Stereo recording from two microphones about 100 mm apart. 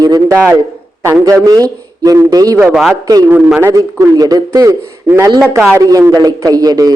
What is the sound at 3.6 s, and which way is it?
A man's voice, 30° right (ahead or behind).